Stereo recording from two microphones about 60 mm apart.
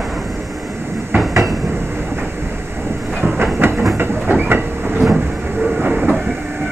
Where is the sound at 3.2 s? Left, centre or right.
Right.